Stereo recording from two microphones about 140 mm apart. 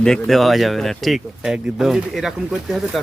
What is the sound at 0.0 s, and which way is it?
Speech, centre (ahead or behind).